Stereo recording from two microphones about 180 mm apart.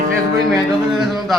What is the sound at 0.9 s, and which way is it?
Speech, centre (ahead or behind).